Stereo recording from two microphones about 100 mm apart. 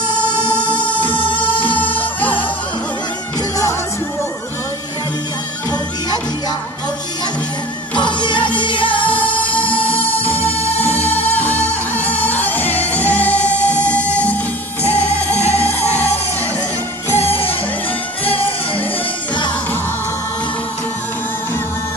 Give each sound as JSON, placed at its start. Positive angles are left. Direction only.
{"t": 0.4, "sound": "music", "side_deg": 50}
{"t": 1.8, "sound": "music", "side_deg": 15}
{"t": 7.9, "sound": "music", "side_deg": 50}
{"t": 9.1, "sound": "music", "side_deg": 15}
{"t": 10.6, "sound": "music", "side_deg": 90}
{"t": 11.3, "sound": "music", "side_deg": 15}